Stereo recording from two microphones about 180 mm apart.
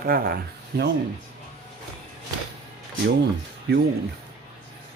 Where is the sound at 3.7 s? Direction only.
65° right (ahead or behind).